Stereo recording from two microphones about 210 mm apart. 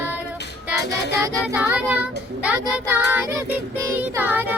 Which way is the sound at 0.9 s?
55° left (ahead or behind).